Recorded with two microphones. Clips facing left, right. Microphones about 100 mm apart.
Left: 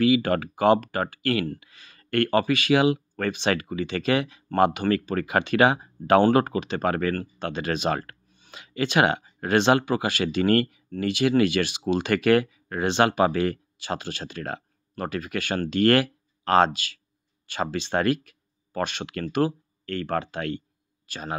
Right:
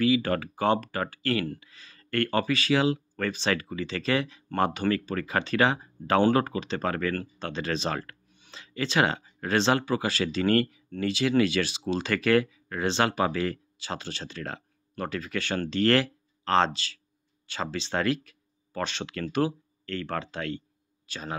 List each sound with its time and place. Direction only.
0.0 s speech: 60° left (ahead or behind)